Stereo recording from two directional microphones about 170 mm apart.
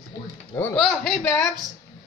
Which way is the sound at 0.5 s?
10° left (ahead or behind).